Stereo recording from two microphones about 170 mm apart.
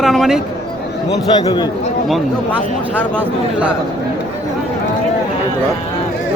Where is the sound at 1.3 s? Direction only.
25° left (ahead or behind).